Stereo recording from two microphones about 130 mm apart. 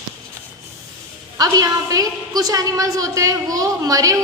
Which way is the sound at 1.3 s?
30° right (ahead or behind).